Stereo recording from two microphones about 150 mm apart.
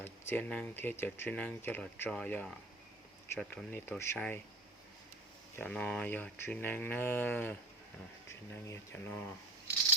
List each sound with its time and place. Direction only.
0.0 s speech: 15° left (ahead or behind)
5.5 s speech: 10° left (ahead or behind)
8.6 s speech: 15° left (ahead or behind)